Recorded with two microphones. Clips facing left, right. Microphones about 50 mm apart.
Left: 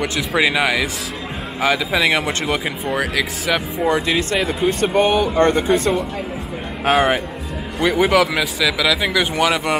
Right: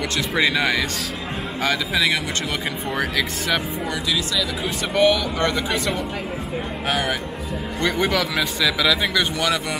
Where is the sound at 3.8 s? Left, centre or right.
Left.